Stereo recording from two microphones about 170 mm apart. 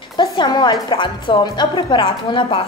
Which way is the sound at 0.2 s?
25° left (ahead or behind).